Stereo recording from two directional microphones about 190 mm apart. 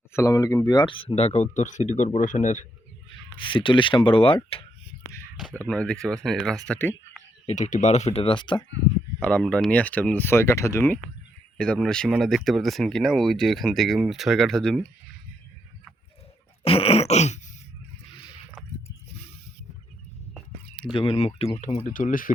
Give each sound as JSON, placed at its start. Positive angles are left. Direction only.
{"t": 0.1, "sound": "speech", "side_deg": 15}
{"t": 3.3, "sound": "speech", "side_deg": 25}
{"t": 5.4, "sound": "speech", "side_deg": 5}
{"t": 7.4, "sound": "speech", "side_deg": 40}
{"t": 9.2, "sound": "speech", "side_deg": 5}
{"t": 16.6, "sound": "throat clearing", "side_deg": 30}
{"t": 20.7, "sound": "speech", "side_deg": 25}
{"t": 21.8, "sound": "speech", "side_deg": 45}